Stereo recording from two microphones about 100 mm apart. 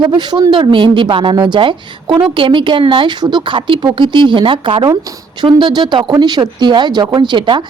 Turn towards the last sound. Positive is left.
turn(degrees=-55)  # may be behind; listen again after turning